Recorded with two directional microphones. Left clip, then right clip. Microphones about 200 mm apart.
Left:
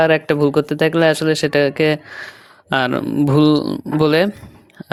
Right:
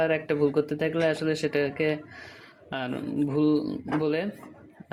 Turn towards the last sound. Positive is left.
turn(degrees=45)  # may be behind; listen again after turning